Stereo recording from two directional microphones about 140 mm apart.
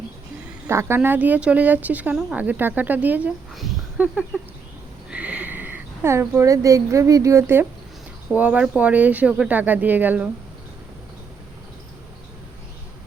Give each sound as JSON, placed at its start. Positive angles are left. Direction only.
{"t": 0.7, "sound": "speech", "side_deg": -20}